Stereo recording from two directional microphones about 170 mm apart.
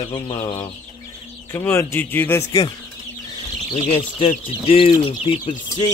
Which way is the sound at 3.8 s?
40° left (ahead or behind).